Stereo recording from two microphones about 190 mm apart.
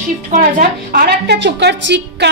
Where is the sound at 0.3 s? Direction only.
50° right (ahead or behind).